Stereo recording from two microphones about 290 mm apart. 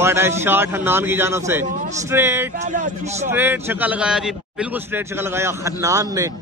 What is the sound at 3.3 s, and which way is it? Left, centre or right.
A man's voice, centre.